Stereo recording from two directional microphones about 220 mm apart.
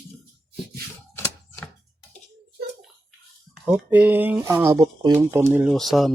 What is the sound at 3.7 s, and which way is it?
Speech, 5° right (ahead or behind).